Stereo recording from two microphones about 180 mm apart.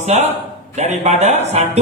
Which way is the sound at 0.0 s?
40° right (ahead or behind).